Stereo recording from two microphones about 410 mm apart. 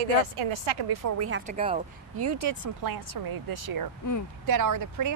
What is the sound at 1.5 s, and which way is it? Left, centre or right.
Speech, centre.